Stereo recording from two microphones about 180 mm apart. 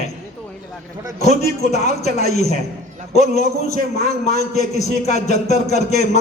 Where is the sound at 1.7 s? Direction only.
40° left (ahead or behind).